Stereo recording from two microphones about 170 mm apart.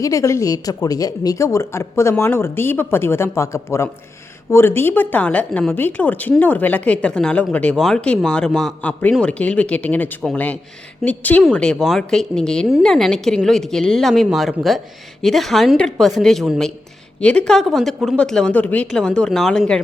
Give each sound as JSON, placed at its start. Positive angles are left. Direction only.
{"t": 0.0, "sound": "a woman's voice", "side_deg": 20}